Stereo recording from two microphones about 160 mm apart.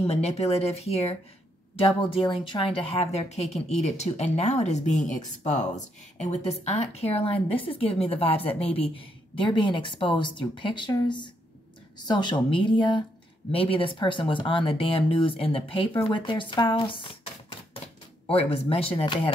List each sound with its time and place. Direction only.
0.0 s a woman's voice: 40° left (ahead or behind)